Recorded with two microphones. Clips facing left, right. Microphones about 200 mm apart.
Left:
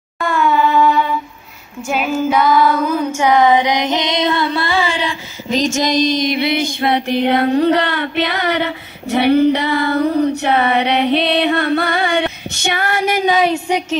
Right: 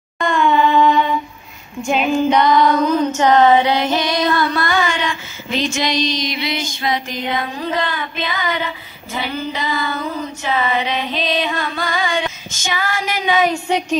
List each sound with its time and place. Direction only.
0.2 s a sound: 5° left (ahead or behind)
1.9 s female singing: 5° left (ahead or behind); by 13.5 s 40° left (ahead or behind)
13.5 s speech: 10° left (ahead or behind)